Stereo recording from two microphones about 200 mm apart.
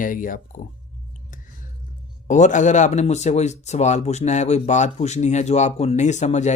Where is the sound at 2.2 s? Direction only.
40° left (ahead or behind).